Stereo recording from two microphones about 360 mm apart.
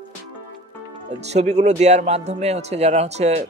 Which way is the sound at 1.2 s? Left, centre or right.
Centre.